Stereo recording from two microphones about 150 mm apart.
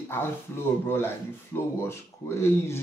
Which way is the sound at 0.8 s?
15° left (ahead or behind).